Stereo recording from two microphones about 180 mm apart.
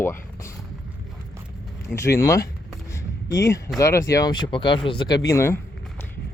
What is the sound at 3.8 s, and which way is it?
Speech, 15° left (ahead or behind).